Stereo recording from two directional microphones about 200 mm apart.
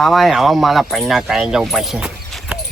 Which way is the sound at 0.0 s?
Centre (ahead or behind).